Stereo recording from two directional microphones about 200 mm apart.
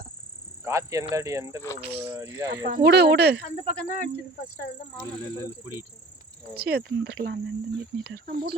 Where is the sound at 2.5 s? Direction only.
50° right (ahead or behind).